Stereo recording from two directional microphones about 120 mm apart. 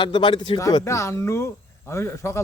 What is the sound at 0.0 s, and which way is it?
Speech, 40° left (ahead or behind).